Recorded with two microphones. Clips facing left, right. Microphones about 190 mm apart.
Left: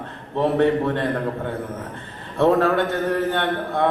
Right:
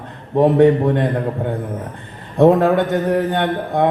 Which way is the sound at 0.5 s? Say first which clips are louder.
Right 4 dB; 15° right (ahead or behind).